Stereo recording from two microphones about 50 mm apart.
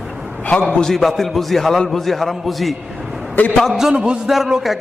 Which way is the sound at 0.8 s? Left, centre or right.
Centre.